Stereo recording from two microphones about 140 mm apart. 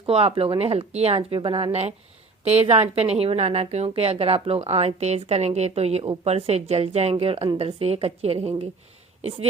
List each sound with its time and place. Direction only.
0.0 s a woman's voice: 45° right (ahead or behind)